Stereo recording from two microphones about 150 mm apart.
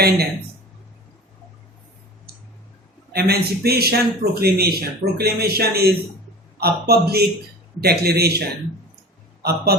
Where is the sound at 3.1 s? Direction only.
90° right.